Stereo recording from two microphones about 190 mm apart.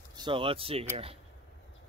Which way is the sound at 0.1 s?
25° right (ahead or behind).